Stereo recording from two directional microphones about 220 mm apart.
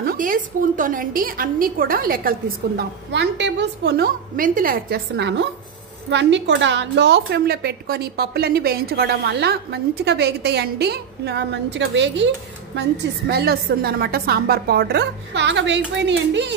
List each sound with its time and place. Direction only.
0.0 s a woman's voice: 40° right (ahead or behind); by 12.3 s 55° right (ahead or behind)
13.3 s a woman's voice: 45° right (ahead or behind)